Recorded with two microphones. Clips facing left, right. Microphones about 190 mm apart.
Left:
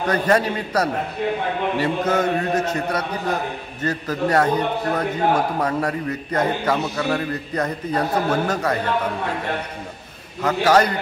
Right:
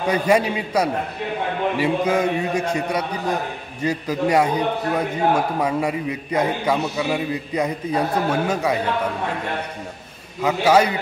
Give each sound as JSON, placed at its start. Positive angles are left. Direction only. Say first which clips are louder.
{"t": 0.0, "sound": "a man's voice", "louder": "right 1 dB", "side_deg": -10}
{"t": 10.4, "sound": "a man's voice", "louder": "even", "side_deg": -10}